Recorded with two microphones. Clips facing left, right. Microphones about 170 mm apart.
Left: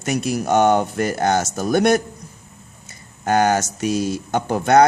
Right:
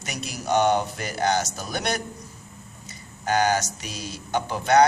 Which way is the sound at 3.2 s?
50° left (ahead or behind).